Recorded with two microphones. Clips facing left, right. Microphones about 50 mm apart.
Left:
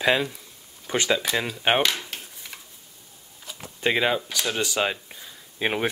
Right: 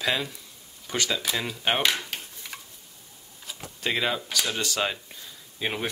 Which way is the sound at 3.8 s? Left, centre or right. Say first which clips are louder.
Left 4 dB; centre.